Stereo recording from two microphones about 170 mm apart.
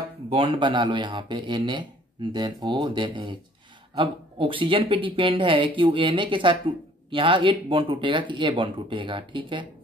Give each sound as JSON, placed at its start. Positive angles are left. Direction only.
{"t": 0.3, "sound": "speech", "side_deg": -30}